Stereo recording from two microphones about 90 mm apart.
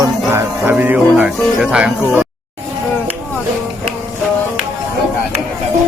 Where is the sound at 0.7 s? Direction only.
20° right (ahead or behind).